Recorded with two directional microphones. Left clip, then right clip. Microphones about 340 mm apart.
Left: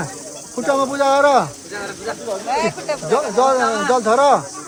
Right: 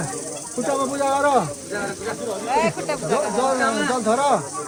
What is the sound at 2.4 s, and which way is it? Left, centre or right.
Speech, centre.